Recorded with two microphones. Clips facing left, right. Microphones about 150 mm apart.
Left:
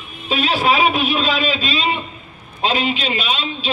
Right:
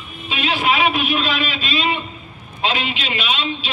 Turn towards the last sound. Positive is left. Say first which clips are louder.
# even
turn(degrees=40)  # may be behind; listen again after turning